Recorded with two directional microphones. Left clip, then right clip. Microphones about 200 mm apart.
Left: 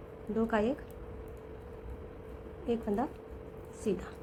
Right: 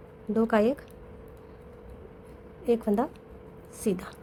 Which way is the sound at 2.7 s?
45° right (ahead or behind).